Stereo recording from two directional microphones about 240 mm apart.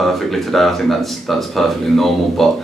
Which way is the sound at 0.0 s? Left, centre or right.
Centre.